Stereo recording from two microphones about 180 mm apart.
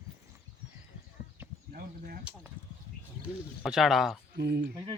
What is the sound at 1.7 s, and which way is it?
Speech, 55° right (ahead or behind).